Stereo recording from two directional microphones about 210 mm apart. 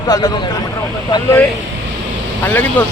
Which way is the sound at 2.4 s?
10° left (ahead or behind).